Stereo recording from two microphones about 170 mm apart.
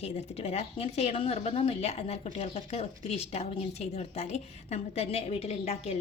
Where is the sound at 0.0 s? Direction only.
40° left (ahead or behind).